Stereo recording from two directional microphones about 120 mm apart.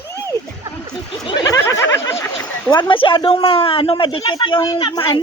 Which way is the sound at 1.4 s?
25° left (ahead or behind).